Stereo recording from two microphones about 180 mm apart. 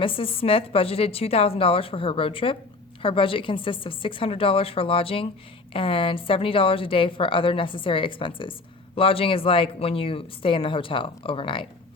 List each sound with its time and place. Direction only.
0.0 s a woman's voice: 30° left (ahead or behind)